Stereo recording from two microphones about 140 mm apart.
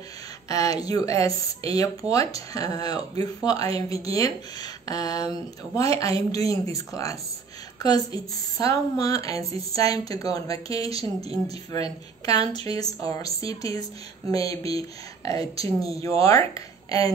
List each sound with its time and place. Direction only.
0.5 s speech: 25° left (ahead or behind)